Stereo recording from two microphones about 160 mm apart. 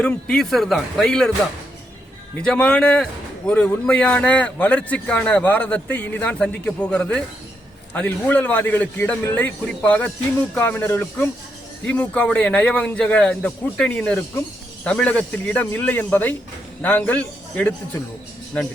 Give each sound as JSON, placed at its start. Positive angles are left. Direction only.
{"t": 0.0, "sound": "a man's voice", "side_deg": 5}
{"t": 2.4, "sound": "a man's voice", "side_deg": 5}